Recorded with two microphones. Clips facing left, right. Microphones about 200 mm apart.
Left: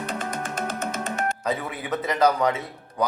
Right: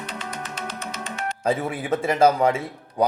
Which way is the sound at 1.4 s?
30° right (ahead or behind).